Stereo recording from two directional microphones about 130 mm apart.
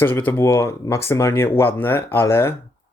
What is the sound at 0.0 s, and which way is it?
Speech, 15° left (ahead or behind).